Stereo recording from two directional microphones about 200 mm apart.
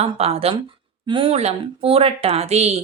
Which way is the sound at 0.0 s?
30° right (ahead or behind).